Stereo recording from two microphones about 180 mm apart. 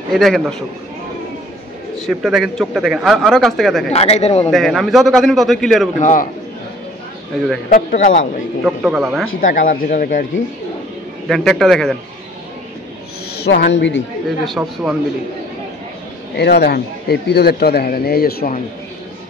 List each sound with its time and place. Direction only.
0.1 s speech: centre (ahead or behind)
2.0 s speech: centre (ahead or behind)
3.9 s a man's voice: 35° left (ahead or behind)
4.5 s speech: centre (ahead or behind)
5.9 s speech: 45° left (ahead or behind)
7.9 s a man's voice: 40° left (ahead or behind)
8.6 s speech: 5° right (ahead or behind)
9.4 s speech: 50° left (ahead or behind)
11.2 s speech: centre (ahead or behind)
13.4 s a woman's voice: 60° left (ahead or behind); by 14.0 s 80° left
14.4 s speech: 5° left (ahead or behind)
16.3 s speech: 65° left (ahead or behind)